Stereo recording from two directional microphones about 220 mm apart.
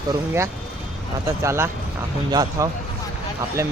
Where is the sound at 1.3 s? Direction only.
10° right (ahead or behind).